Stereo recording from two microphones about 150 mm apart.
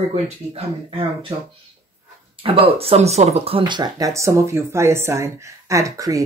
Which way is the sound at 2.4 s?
40° right (ahead or behind).